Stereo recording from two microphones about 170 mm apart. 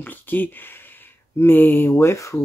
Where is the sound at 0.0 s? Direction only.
10° left (ahead or behind).